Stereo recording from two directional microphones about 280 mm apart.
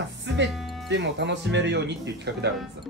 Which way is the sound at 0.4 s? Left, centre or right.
Right.